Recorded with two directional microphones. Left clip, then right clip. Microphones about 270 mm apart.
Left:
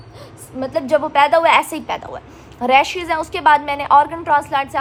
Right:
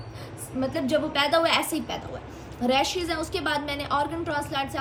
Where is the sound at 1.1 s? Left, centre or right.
Centre.